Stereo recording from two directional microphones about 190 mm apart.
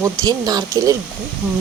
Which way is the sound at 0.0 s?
20° right (ahead or behind).